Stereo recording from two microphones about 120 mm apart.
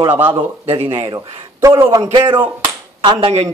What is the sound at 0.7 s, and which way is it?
Speech, 45° right (ahead or behind).